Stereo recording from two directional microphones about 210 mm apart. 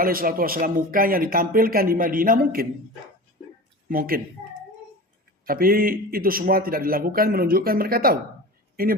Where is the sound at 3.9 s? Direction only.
45° right (ahead or behind).